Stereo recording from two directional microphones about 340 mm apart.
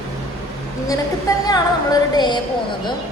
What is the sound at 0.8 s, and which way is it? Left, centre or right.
A woman's voice, centre.